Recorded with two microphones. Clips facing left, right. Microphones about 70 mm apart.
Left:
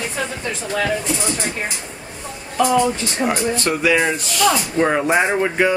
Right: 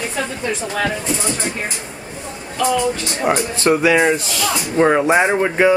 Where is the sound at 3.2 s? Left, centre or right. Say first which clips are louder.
Right 2 dB; right.